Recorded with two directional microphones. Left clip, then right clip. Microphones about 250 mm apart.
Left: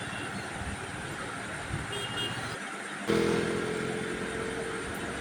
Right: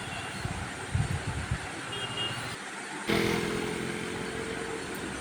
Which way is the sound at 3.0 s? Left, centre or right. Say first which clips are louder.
Left 1 dB; right.